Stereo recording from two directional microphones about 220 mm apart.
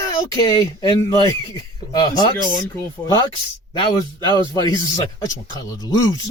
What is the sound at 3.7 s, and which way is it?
Speech, 20° left (ahead or behind).